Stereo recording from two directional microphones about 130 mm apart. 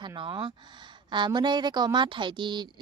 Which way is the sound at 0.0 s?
35° right (ahead or behind).